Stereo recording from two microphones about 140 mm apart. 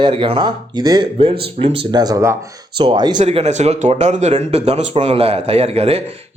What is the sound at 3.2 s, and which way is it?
Speech, 50° right (ahead or behind).